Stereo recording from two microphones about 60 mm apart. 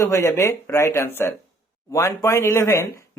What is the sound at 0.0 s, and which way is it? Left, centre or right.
Speech, left.